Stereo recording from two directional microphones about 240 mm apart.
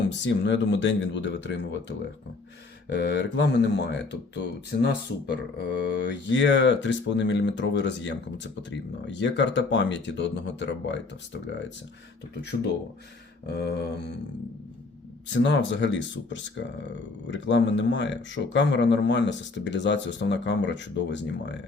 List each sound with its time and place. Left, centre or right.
0.2 s speech: left
12.4 s speech: left
15.3 s speech: left